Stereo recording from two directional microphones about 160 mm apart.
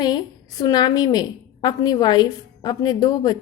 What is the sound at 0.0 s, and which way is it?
A woman's voice, 25° left (ahead or behind).